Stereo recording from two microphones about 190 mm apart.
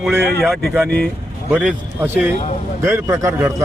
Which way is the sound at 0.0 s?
Centre (ahead or behind).